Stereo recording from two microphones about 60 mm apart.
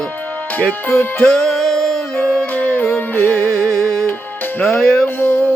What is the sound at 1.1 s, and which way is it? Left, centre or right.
Music, centre.